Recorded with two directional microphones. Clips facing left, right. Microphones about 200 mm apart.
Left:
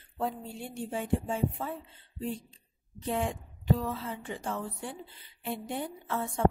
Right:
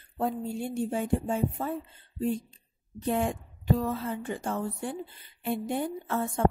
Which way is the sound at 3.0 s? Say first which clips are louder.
Right 4 dB; 50° right (ahead or behind).